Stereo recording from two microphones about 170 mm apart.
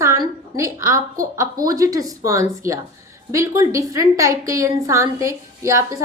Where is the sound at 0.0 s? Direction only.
15° right (ahead or behind).